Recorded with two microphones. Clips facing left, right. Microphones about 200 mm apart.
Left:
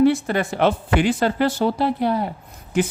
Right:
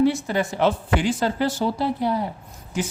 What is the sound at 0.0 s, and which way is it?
A woman's voice, 60° left (ahead or behind).